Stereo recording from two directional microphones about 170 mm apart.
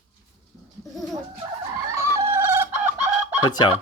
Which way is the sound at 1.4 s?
20° right (ahead or behind).